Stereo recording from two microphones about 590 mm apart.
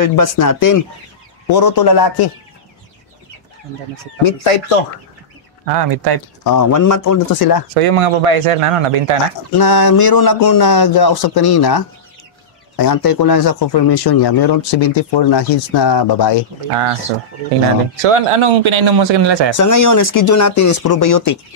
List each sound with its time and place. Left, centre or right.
0.0 s speech: left
4.2 s speech: left
5.8 s speech: right
6.4 s speech: left
7.7 s speech: right
9.5 s speech: left
18.0 s a man's voice: right
19.5 s speech: left